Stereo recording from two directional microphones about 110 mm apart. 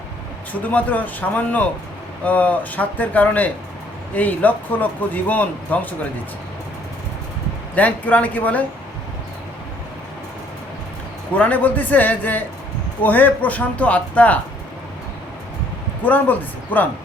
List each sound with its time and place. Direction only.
0.5 s speech: 15° left (ahead or behind)
7.8 s speech: 15° left (ahead or behind)
11.3 s speech: 15° left (ahead or behind)
16.0 s speech: 15° left (ahead or behind)